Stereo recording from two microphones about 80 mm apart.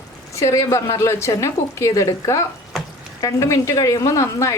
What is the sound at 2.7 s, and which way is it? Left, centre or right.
Stir, centre.